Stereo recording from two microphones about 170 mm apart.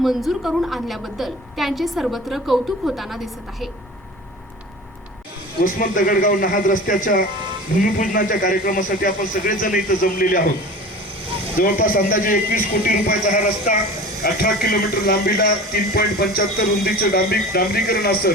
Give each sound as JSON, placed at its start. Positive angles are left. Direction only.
{"t": 0.0, "sound": "a woman's voice", "side_deg": 0}
{"t": 5.5, "sound": "speech", "side_deg": 55}
{"t": 11.5, "sound": "speech", "side_deg": 55}